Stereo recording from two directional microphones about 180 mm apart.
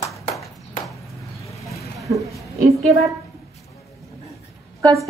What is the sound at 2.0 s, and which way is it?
Speech, 15° right (ahead or behind).